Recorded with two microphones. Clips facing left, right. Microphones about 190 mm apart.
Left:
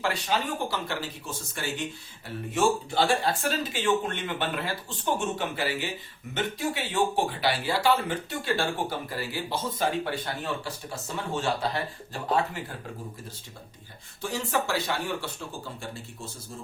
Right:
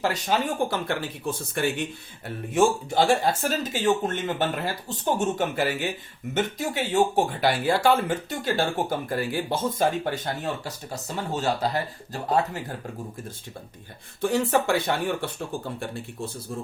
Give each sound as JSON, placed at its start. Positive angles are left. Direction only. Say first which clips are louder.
{"t": 0.0, "sound": "speech", "louder": "right 3 dB", "side_deg": -45}
{"t": 2.5, "sound": "speech", "louder": "right 4 dB", "side_deg": -45}
{"t": 14.2, "sound": "speech", "louder": "right 7 dB", "side_deg": -55}